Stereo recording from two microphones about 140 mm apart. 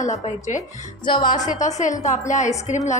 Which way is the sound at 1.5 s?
60° left (ahead or behind).